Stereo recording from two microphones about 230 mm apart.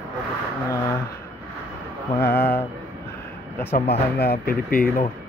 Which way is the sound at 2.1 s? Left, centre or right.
Centre.